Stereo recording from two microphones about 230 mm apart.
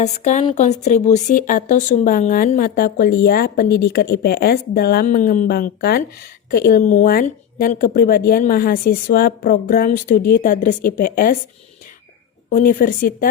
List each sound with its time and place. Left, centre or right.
0.0 s speech: left
12.5 s speech: left